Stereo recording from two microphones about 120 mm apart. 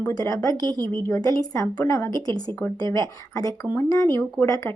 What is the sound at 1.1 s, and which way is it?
A woman's voice, 30° left (ahead or behind).